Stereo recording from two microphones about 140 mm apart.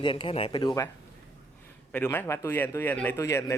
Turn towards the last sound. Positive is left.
turn(degrees=20)  # may be behind; listen again after turning